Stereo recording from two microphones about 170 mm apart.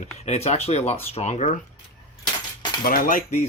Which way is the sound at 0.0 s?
40° left (ahead or behind).